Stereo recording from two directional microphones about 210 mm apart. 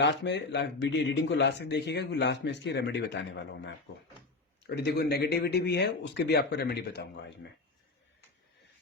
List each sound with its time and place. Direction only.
0.0 s speech: 55° left (ahead or behind)